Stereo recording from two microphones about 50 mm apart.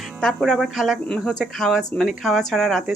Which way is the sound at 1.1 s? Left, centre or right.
Centre.